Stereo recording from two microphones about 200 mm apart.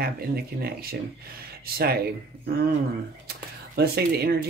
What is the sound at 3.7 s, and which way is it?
Speech, 55° right (ahead or behind).